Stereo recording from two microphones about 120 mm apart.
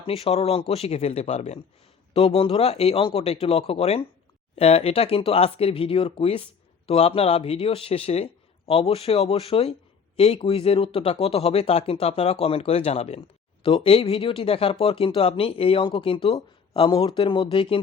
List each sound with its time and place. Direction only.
0.0 s speech: 55° left (ahead or behind)
2.1 s speech: 50° left (ahead or behind)
13.6 s speech: 50° left (ahead or behind)